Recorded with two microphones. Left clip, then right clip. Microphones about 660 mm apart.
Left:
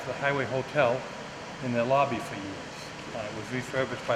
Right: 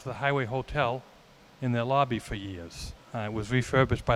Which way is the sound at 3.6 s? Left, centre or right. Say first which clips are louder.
Right 5 dB; right.